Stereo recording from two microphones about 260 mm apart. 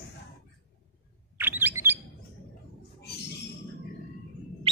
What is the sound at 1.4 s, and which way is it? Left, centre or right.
Bird, centre.